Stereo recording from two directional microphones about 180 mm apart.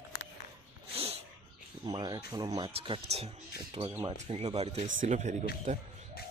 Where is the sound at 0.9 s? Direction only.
35° right (ahead or behind).